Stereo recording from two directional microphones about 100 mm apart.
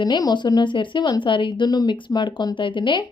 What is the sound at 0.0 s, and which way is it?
Speech, 45° left (ahead or behind).